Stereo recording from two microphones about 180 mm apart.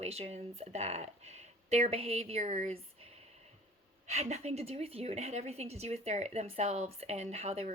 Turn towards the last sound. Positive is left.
turn(degrees=-35)  # may be behind; listen again after turning